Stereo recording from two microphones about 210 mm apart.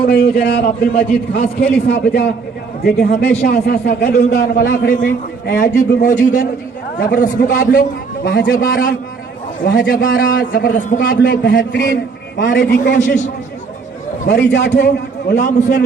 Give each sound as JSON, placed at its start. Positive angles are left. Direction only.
{"t": 0.0, "sound": "a man's voice", "side_deg": 50}
{"t": 8.5, "sound": "a man's voice", "side_deg": 45}
{"t": 9.6, "sound": "a man's voice", "side_deg": 60}
{"t": 10.6, "sound": "a man's voice", "side_deg": 40}
{"t": 10.9, "sound": "a man's voice", "side_deg": 50}
{"t": 14.3, "sound": "a man's voice", "side_deg": 55}
{"t": 15.3, "sound": "a man's voice", "side_deg": 35}